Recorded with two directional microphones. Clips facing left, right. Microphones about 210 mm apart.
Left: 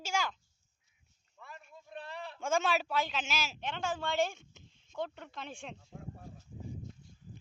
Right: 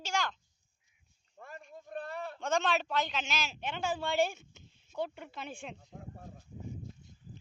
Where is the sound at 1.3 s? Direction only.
45° right (ahead or behind).